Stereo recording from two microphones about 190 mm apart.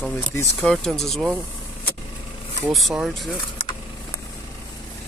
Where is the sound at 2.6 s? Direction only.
Centre (ahead or behind).